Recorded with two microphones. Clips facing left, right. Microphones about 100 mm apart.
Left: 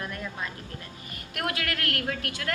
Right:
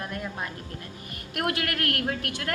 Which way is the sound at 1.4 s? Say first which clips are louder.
Right 3 dB; 50° right (ahead or behind).